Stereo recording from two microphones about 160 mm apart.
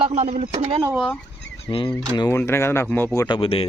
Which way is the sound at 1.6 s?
30° left (ahead or behind).